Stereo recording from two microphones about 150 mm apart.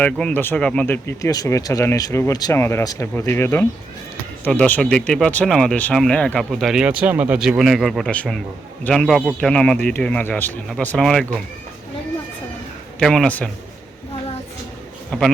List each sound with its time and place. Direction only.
0.0 s speech: 10° left (ahead or behind)
13.0 s speech: 5° left (ahead or behind)
15.1 s speech: 5° left (ahead or behind)